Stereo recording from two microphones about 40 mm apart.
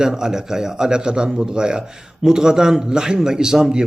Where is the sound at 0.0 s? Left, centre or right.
Centre.